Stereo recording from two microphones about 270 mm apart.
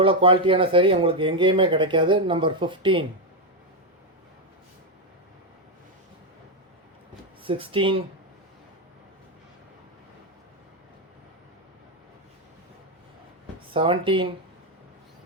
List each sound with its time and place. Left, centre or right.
0.0 s speech: centre
7.4 s speech: centre
13.7 s speech: centre